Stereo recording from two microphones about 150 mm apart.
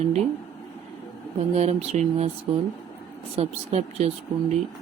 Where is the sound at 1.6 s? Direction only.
45° right (ahead or behind).